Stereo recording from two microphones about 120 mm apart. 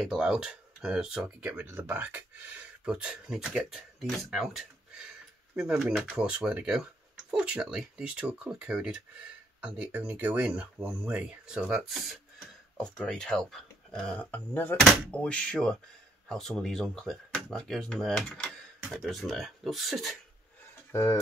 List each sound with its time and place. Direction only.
0.1 s speech: 5° right (ahead or behind)
14.3 s speech: 15° left (ahead or behind)
18.8 s speech: 5° right (ahead or behind)
20.9 s speech: 20° left (ahead or behind)